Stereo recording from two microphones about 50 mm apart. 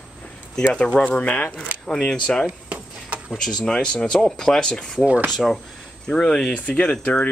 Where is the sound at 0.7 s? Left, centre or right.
Left.